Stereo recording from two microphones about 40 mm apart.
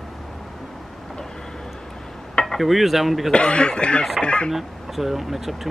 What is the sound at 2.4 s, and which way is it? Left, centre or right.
Cutlery, centre.